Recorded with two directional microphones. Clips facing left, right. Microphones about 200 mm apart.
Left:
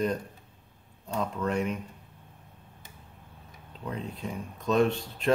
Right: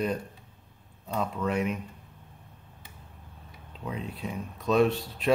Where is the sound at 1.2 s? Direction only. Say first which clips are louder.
Even; 5° right (ahead or behind).